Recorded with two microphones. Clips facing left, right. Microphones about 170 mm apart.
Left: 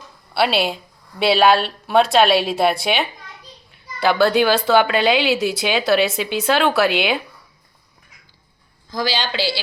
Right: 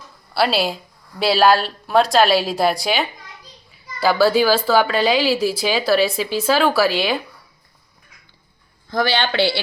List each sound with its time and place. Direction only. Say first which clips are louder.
0.3 s a child's voice: even; centre (ahead or behind)
8.9 s speech: right 3 dB; 60° right (ahead or behind)